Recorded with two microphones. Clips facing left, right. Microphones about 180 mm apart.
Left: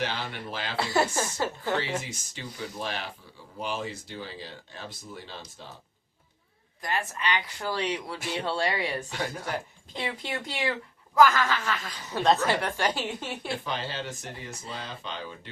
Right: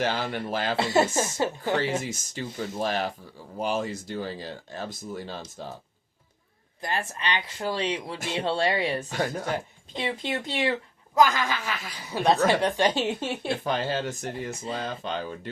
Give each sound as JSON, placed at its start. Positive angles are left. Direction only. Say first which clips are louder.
{"t": 0.0, "sound": "speech", "louder": "right 5 dB", "side_deg": -45}
{"t": 0.8, "sound": "speech", "louder": "right 2 dB", "side_deg": -20}
{"t": 1.8, "sound": "speech", "louder": "right 5 dB", "side_deg": -45}
{"t": 6.8, "sound": "speech", "louder": "even", "side_deg": -25}
{"t": 13.7, "sound": "speech", "louder": "right 6 dB", "side_deg": -45}